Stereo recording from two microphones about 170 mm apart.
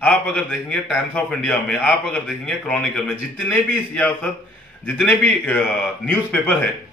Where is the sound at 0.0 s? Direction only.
5° left (ahead or behind).